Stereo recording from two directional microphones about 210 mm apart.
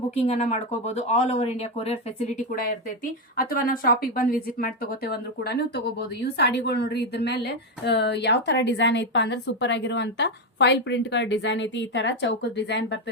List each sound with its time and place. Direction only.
0.1 s speech: 30° left (ahead or behind)
2.6 s a woman's voice: 45° left (ahead or behind)